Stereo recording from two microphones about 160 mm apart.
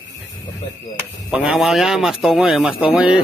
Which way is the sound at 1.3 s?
5° right (ahead or behind).